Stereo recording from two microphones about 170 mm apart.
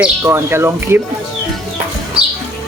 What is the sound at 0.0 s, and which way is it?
Speech, 15° right (ahead or behind).